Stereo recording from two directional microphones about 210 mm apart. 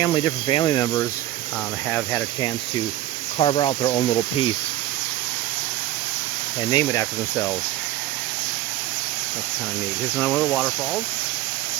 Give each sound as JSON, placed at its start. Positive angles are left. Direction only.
{"t": 0.0, "sound": "speech", "side_deg": 20}
{"t": 3.3, "sound": "speech", "side_deg": 25}
{"t": 6.7, "sound": "speech", "side_deg": 15}
{"t": 10.2, "sound": "speech", "side_deg": 5}